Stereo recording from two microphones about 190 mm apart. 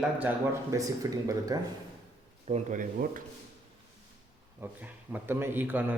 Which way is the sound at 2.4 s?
40° right (ahead or behind).